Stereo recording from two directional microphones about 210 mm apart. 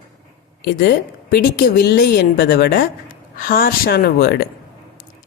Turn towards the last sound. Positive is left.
turn(degrees=45)  # may be behind; listen again after turning